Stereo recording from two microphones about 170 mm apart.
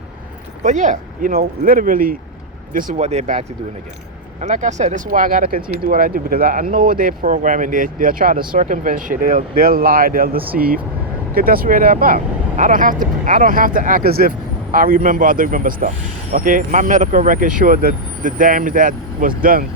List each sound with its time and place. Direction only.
0.6 s speech: 45° right (ahead or behind)